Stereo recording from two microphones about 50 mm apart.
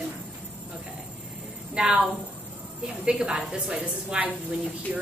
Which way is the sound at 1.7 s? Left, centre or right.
Centre.